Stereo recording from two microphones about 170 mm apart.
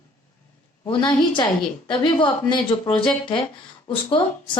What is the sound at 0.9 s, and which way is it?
A woman's voice, 25° left (ahead or behind).